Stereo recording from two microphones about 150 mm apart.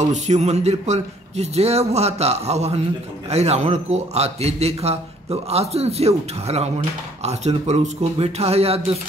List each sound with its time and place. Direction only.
0.0 s a man's voice: 50° right (ahead or behind)